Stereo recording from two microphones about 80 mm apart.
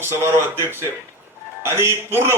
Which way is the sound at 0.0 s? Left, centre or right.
Right.